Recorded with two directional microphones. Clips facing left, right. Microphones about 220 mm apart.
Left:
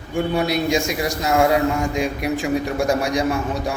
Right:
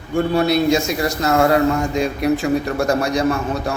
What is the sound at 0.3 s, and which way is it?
A man's voice, 15° left (ahead or behind).